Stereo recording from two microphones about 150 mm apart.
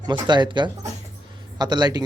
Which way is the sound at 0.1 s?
30° right (ahead or behind).